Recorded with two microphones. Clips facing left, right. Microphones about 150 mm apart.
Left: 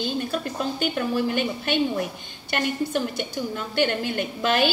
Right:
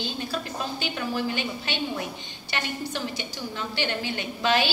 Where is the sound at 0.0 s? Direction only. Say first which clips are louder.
Left 5 dB; 50° left (ahead or behind).